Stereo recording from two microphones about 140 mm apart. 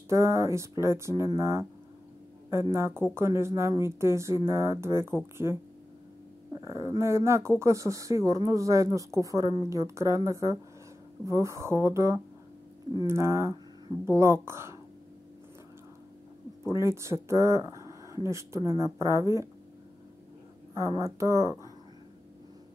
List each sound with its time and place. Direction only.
0.1 s speech: 20° right (ahead or behind)
2.7 s speech: 15° right (ahead or behind)
16.6 s speech: 20° right (ahead or behind)
21.0 s speech: 20° right (ahead or behind)